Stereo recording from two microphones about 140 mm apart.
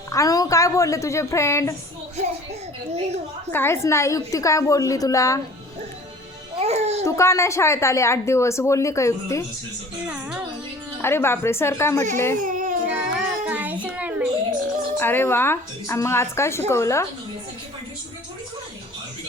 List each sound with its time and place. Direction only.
0.1 s a woman's voice: 25° left (ahead or behind)
2.1 s a child's voice: 50° right (ahead or behind)
3.5 s a woman's voice: 15° left (ahead or behind)
6.6 s babbling: 50° right (ahead or behind)
7.0 s a woman's voice: 20° left (ahead or behind)
10.1 s a child's voice: 10° right (ahead or behind)
11.0 s a woman's voice: 15° left (ahead or behind)
12.4 s child singing: 65° right (ahead or behind)
12.8 s child singing: 10° right (ahead or behind)
13.8 s a sound: 10° right (ahead or behind)
14.9 s a woman's voice: 15° left (ahead or behind)